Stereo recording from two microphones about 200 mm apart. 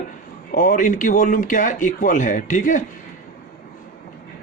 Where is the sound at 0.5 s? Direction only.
40° left (ahead or behind).